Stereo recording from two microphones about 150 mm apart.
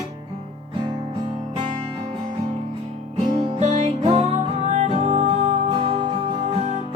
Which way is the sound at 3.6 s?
50° right (ahead or behind).